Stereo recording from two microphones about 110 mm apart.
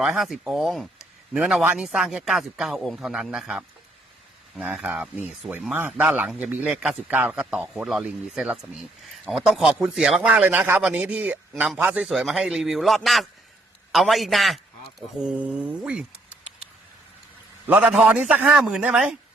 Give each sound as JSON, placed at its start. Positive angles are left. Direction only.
{"t": 0.0, "sound": "a man's voice", "side_deg": -5}
{"t": 4.5, "sound": "a man's voice", "side_deg": -15}
{"t": 17.7, "sound": "a man's voice", "side_deg": -15}